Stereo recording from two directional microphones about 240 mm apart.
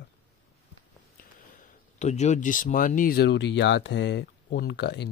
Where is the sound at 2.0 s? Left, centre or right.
Left.